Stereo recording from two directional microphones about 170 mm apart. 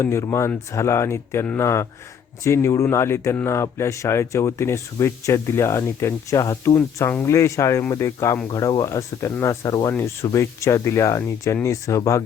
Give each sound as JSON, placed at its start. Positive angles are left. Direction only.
{"t": 0.0, "sound": "speech", "side_deg": 15}